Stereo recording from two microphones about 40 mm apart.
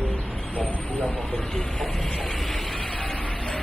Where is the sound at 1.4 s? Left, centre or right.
Centre.